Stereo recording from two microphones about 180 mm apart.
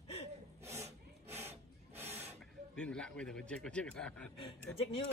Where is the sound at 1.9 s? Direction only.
10° right (ahead or behind).